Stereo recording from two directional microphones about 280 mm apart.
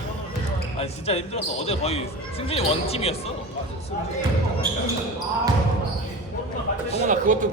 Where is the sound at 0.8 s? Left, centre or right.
Left.